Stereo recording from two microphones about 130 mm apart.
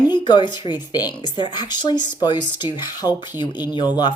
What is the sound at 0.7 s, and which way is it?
Speech, 35° left (ahead or behind).